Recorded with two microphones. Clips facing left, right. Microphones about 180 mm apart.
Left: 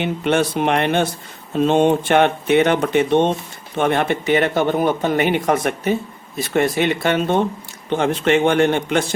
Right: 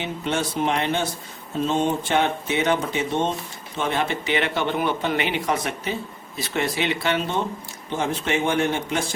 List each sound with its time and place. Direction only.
0.0 s a man's voice: 60° left (ahead or behind)
7.9 s speech: 65° left (ahead or behind)